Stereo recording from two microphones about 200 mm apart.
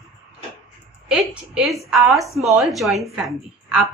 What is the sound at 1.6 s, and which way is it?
A woman's voice, 5° right (ahead or behind).